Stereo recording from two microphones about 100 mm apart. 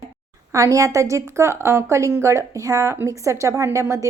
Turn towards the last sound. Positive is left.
turn(degrees=-30)  # may be behind; listen again after turning